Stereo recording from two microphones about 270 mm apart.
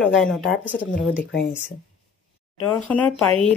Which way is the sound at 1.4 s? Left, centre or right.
Centre.